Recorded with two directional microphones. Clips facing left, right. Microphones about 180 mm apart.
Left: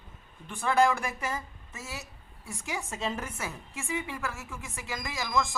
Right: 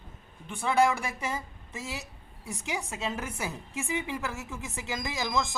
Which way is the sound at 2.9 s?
5° right (ahead or behind).